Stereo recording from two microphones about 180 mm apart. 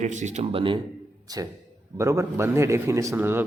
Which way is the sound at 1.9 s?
15° right (ahead or behind).